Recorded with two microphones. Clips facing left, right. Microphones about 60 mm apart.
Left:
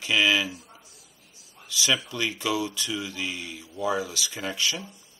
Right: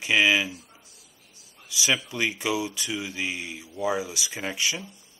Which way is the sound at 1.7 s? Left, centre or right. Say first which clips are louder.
Even; centre.